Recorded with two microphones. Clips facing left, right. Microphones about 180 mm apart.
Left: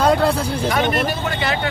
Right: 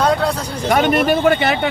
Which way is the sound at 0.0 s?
5° left (ahead or behind).